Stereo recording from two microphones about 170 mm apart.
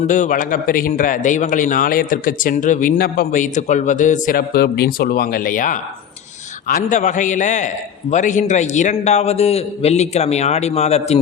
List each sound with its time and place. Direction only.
0.1 s a man's voice: 50° left (ahead or behind)